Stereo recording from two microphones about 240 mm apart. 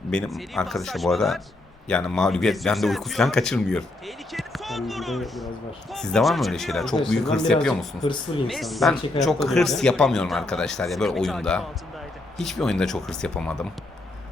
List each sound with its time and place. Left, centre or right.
0.1 s a man's voice: centre
8.0 s speech: left
8.4 s a man's voice: centre